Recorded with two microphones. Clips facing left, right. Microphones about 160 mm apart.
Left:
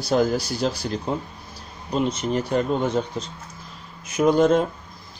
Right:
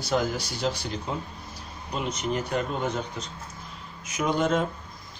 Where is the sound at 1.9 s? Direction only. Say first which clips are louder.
Left 6 dB; 30° left (ahead or behind).